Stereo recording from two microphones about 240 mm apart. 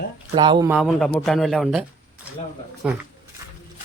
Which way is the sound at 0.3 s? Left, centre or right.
Centre.